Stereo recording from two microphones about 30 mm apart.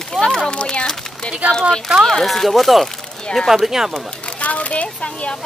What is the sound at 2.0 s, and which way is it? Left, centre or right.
Speech, centre.